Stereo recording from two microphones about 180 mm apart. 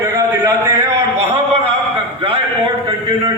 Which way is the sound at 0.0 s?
15° right (ahead or behind).